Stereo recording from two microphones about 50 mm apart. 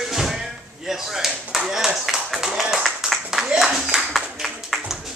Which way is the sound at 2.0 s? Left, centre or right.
Centre.